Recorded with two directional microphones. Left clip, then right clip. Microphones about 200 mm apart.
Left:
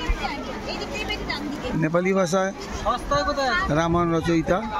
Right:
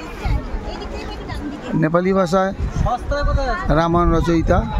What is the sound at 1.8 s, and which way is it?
Speech, 25° right (ahead or behind).